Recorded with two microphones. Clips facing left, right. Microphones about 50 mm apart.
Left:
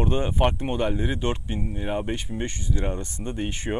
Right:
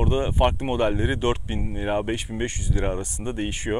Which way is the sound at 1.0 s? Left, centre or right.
Right.